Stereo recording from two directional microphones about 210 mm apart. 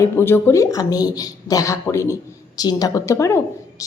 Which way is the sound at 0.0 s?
10° left (ahead or behind).